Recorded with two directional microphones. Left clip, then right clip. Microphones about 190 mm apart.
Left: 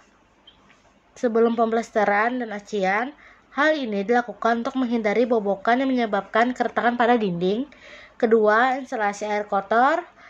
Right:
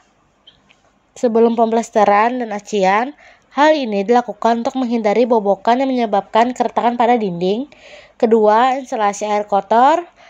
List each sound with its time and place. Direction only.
1.1 s a woman's voice: 30° right (ahead or behind)
7.4 s speech: 30° right (ahead or behind)